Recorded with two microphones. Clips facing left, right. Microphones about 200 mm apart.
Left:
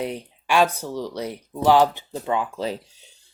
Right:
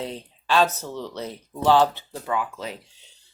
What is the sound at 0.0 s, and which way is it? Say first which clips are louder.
Speech: left 4 dB; 15° left (ahead or behind).